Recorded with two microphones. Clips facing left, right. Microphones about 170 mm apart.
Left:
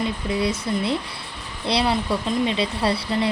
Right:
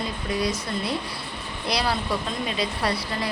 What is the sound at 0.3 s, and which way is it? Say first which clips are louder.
A woman's voice: left 2 dB; 25° left (ahead or behind).